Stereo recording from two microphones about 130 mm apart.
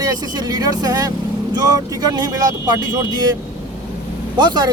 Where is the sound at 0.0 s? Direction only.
30° right (ahead or behind).